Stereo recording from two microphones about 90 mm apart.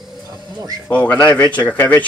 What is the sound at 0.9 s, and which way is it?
Speech, 15° left (ahead or behind).